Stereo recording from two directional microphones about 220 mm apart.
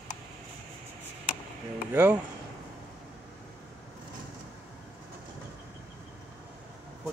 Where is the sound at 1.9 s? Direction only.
10° right (ahead or behind).